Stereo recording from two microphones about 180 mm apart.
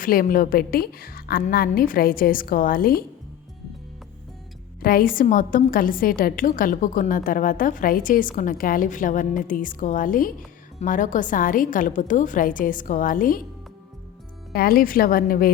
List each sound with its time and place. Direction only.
0.0 s a woman's voice: 50° left (ahead or behind)
4.8 s a woman's voice: 55° left (ahead or behind)
14.5 s a woman's voice: 55° left (ahead or behind)